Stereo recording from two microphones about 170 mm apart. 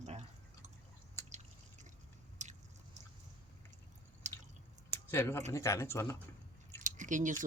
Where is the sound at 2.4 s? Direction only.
45° right (ahead or behind).